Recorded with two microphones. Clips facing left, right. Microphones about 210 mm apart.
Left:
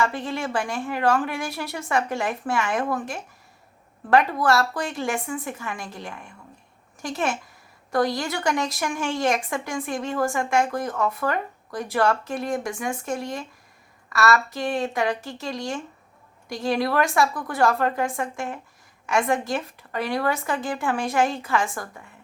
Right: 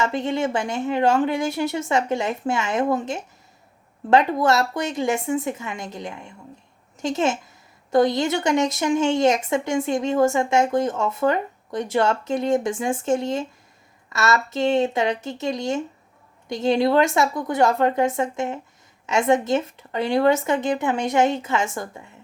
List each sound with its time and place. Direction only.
0.0 s speech: 20° right (ahead or behind)